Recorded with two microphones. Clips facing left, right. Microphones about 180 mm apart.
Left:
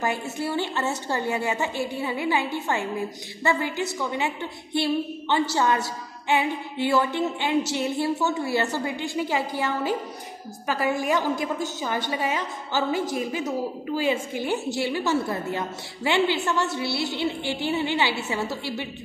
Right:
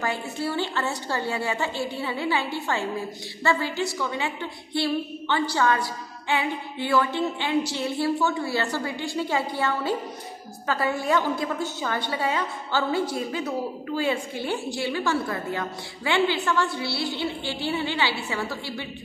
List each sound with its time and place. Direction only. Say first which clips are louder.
0.0 s a woman's voice: left 1 dB; 20° left (ahead or behind)